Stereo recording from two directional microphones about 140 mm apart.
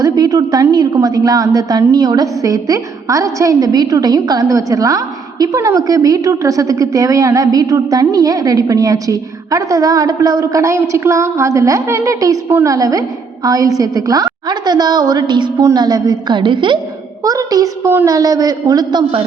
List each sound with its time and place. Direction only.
0.0 s a woman's voice: 25° right (ahead or behind)